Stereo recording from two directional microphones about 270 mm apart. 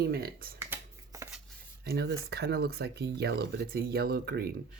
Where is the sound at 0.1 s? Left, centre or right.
Right.